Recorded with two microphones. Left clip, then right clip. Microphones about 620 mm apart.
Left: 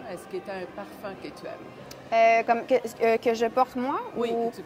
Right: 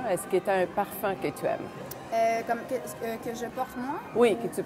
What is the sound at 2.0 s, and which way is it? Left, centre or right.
A woman's voice, left.